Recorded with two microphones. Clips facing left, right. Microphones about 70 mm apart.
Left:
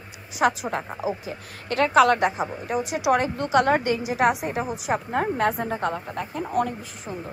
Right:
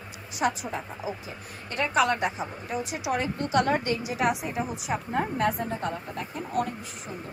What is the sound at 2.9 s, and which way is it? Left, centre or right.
A woman's voice, left.